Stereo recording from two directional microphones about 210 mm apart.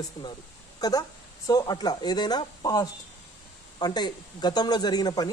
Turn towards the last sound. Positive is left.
turn(degrees=20)  # may be behind; listen again after turning